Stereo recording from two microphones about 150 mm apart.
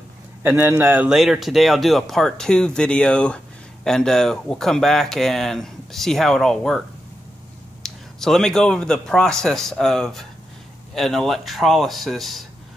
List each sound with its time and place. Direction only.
0.4 s speech: 15° right (ahead or behind); by 6.8 s 5° left (ahead or behind)
7.8 s speech: 5° left (ahead or behind)